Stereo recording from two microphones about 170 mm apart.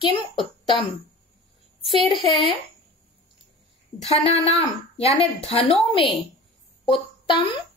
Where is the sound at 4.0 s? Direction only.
35° left (ahead or behind).